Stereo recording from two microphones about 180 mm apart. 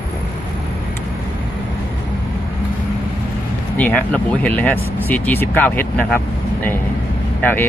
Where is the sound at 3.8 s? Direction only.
10° left (ahead or behind).